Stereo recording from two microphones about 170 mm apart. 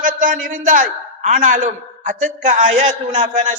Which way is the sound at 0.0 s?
50° right (ahead or behind).